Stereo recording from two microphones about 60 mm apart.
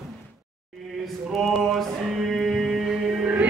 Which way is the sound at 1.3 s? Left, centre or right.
Centre.